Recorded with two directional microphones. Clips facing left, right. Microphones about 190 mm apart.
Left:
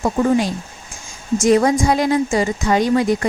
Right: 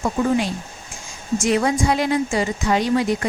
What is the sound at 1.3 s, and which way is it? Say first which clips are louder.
A woman's voice: left 5 dB; 40° left (ahead or behind).